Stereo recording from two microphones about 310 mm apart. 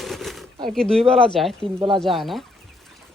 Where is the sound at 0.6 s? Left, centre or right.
Centre.